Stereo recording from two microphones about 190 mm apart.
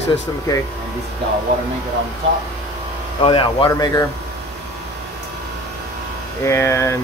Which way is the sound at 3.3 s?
25° left (ahead or behind).